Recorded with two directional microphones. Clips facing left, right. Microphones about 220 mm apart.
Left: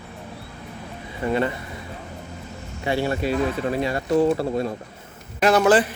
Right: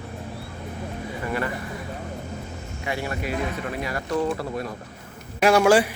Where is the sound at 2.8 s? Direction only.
30° left (ahead or behind).